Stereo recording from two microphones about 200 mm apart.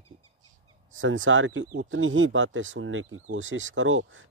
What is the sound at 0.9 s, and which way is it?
Speech, 75° right (ahead or behind).